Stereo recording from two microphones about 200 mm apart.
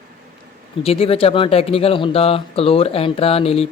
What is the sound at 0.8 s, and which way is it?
Speech, 30° left (ahead or behind).